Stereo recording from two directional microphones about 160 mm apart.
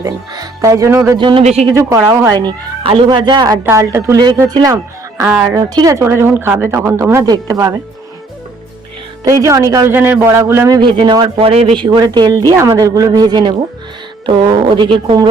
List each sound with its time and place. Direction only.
0.0 s speech: 20° right (ahead or behind)
1.2 s speech: 35° right (ahead or behind)
1.7 s speech: 20° right (ahead or behind)
9.2 s speech: 20° right (ahead or behind)
10.8 s speech: 30° right (ahead or behind)
14.8 s speech: 30° right (ahead or behind)